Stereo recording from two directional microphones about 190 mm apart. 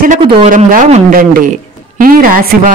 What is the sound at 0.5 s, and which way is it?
A man's voice, 45° right (ahead or behind).